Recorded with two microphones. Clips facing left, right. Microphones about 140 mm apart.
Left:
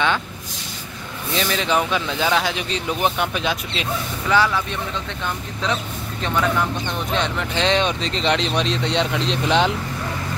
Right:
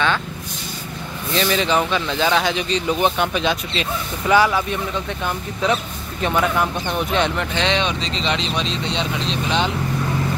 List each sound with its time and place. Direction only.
1.3 s speech: centre (ahead or behind)
4.3 s speech: 10° right (ahead or behind)
7.5 s speech: 40° left (ahead or behind); by 9.7 s 65° left (ahead or behind)